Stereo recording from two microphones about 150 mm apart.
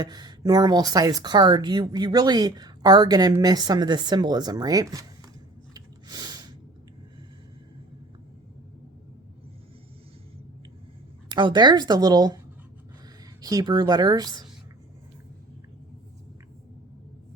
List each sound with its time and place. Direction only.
0.0 s speech: 30° right (ahead or behind)
5.7 s snort: 25° right (ahead or behind)
11.3 s speech: 30° right (ahead or behind)
13.4 s speech: 25° right (ahead or behind)